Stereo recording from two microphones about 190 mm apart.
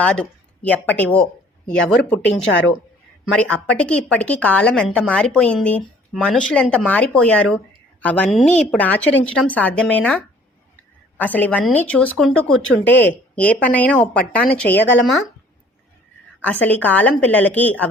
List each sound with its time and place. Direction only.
0.0 s a woman's voice: 5° left (ahead or behind)
2.4 s a woman's voice: 75° left (ahead or behind)
3.3 s speech: 5° left (ahead or behind)
16.4 s speech: 10° left (ahead or behind)